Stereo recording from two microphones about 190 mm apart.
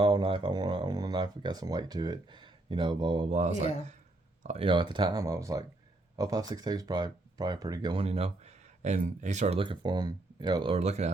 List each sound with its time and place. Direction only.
0.0 s speech: 25° right (ahead or behind)